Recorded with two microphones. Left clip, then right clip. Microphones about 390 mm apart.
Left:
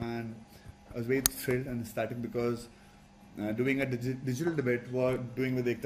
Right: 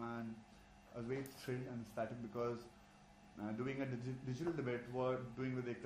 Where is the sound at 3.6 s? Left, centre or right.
Left.